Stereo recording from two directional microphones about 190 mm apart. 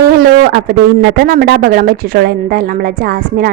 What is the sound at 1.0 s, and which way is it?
A woman's voice, 50° right (ahead or behind).